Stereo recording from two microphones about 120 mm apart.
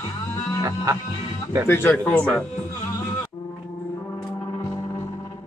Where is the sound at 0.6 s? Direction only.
25° right (ahead or behind).